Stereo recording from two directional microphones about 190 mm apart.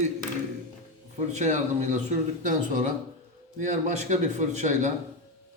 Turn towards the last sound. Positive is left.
turn(degrees=-40)  # may be behind; listen again after turning